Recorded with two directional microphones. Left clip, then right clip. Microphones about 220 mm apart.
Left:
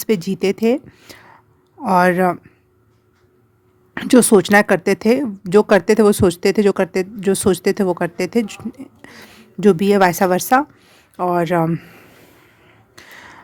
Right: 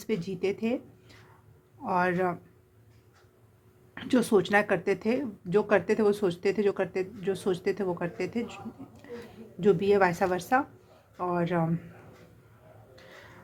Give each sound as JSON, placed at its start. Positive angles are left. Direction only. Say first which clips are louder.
{"t": 0.0, "sound": "speech", "louder": "left 12 dB", "side_deg": 55}
{"t": 3.9, "sound": "speech", "louder": "left 13 dB", "side_deg": 55}
{"t": 13.0, "sound": "a sound", "louder": "left 12 dB", "side_deg": 55}